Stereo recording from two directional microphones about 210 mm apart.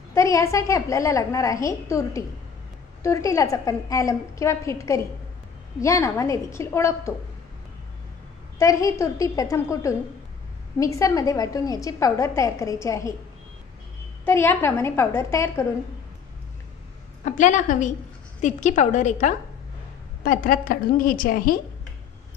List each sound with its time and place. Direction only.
0.1 s a woman's voice: 15° left (ahead or behind)
8.5 s a woman's voice: 15° left (ahead or behind)
14.2 s a woman's voice: 10° left (ahead or behind)
17.2 s a woman's voice: 35° left (ahead or behind)